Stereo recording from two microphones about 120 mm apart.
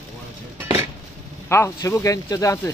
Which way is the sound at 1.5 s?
20° left (ahead or behind).